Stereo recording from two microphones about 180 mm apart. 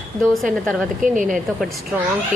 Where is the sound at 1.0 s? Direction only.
45° right (ahead or behind).